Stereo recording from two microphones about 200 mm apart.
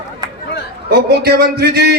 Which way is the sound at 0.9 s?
50° right (ahead or behind).